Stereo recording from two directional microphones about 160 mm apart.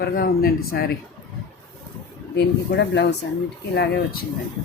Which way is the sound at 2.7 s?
90° left.